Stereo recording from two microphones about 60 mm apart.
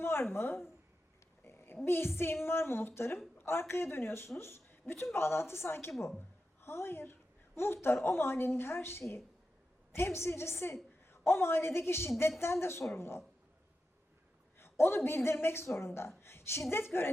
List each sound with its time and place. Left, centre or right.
0.0 s a woman's voice: left
14.6 s a woman's voice: left